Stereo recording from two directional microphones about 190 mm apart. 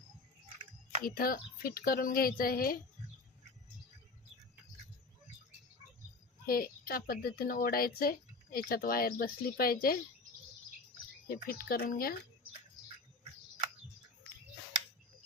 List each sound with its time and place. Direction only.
1.0 s a woman's voice: 50° left (ahead or behind)
6.4 s a woman's voice: 50° left (ahead or behind)
11.3 s a woman's voice: 50° left (ahead or behind)